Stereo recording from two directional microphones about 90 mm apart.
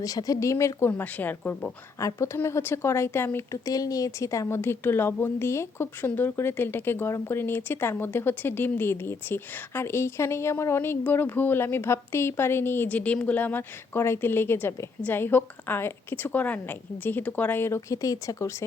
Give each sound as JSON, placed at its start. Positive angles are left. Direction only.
{"t": 0.0, "sound": "speech", "side_deg": 40}
{"t": 1.0, "sound": "a woman's voice", "side_deg": 20}
{"t": 2.0, "sound": "a woman's voice", "side_deg": 40}
{"t": 3.7, "sound": "a woman's voice", "side_deg": 40}
{"t": 17.7, "sound": "speech", "side_deg": 40}